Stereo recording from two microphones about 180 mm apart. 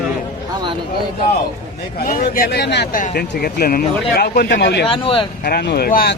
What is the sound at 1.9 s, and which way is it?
A man's voice, 55° left (ahead or behind).